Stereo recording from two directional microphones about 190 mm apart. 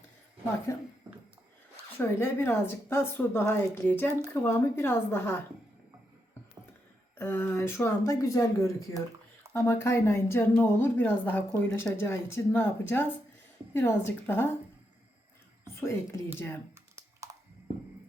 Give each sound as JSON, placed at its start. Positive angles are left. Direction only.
{"t": 0.7, "sound": "a woman's voice", "side_deg": 15}
{"t": 2.0, "sound": "a woman's voice", "side_deg": 10}
{"t": 7.2, "sound": "a woman's voice", "side_deg": 10}
{"t": 15.7, "sound": "a woman's voice", "side_deg": 15}